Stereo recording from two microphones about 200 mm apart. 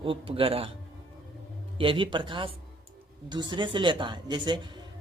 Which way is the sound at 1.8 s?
25° right (ahead or behind).